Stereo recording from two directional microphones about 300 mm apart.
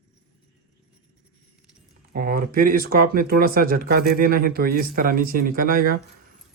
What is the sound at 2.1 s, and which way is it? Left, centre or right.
Speech, right.